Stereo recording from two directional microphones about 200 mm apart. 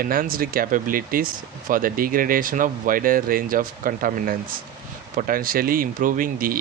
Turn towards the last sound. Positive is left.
turn(degrees=-45)  # may be behind; listen again after turning